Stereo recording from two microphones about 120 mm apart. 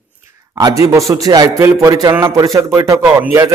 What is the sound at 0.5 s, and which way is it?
A man's voice, 30° right (ahead or behind).